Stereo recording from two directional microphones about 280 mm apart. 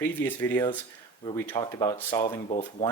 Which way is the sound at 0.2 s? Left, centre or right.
Centre.